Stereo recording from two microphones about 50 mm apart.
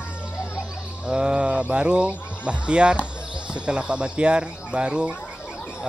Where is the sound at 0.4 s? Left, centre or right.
Centre.